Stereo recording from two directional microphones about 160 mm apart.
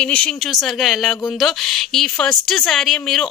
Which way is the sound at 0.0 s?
5° left (ahead or behind).